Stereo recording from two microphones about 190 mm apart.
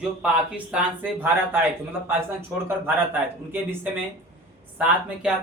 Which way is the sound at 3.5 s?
10° right (ahead or behind).